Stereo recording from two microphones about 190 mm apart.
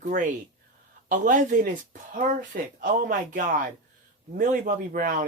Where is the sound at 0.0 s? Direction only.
45° right (ahead or behind).